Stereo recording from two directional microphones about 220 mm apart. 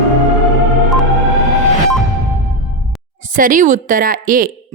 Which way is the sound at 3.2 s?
35° right (ahead or behind).